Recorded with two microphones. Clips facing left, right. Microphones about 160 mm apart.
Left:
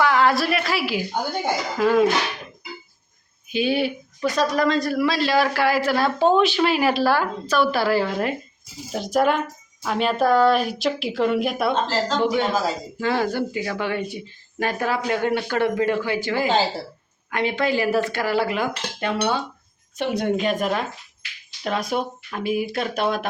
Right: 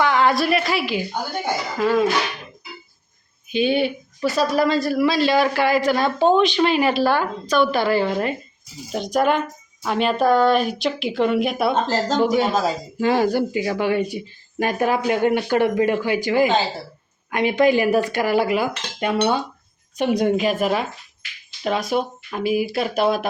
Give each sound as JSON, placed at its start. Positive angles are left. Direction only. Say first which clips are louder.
{"t": 0.0, "sound": "a woman's voice", "louder": "right 1 dB", "side_deg": 0}
{"t": 3.5, "sound": "speech", "louder": "right 2 dB", "side_deg": 5}
{"t": 11.9, "sound": "speech", "louder": "right 3 dB", "side_deg": -45}
{"t": 13.0, "sound": "speech", "louder": "right 5 dB", "side_deg": -15}